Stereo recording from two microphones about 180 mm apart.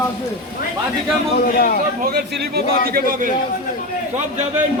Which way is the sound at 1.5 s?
55° left (ahead or behind).